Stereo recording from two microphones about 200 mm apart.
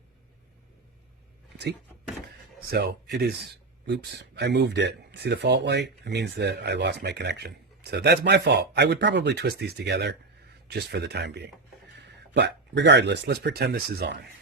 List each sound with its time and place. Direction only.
2.7 s speech: 55° right (ahead or behind)